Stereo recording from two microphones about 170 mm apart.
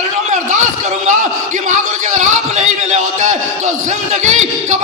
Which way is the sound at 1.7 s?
45° right (ahead or behind).